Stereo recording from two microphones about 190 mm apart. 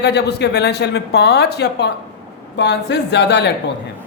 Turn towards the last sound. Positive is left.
turn(degrees=60)  # may be behind; listen again after turning